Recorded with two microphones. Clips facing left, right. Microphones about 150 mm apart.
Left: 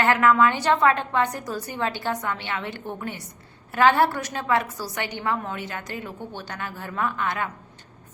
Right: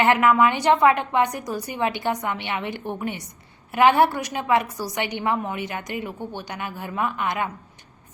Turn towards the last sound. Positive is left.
turn(degrees=-15)  # may be behind; listen again after turning